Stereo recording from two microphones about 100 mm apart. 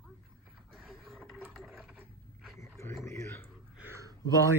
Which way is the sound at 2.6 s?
30° left (ahead or behind).